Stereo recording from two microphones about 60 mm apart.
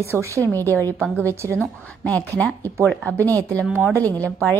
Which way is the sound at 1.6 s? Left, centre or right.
Left.